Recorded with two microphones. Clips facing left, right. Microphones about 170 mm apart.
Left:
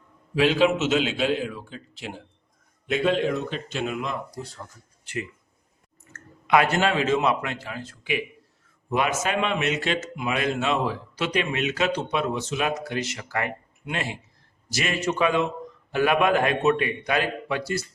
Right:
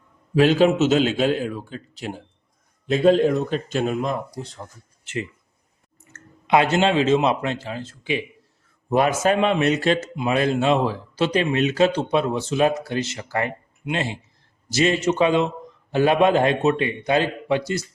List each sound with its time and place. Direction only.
0.3 s speech: 40° right (ahead or behind)
6.1 s a man's voice: 25° right (ahead or behind)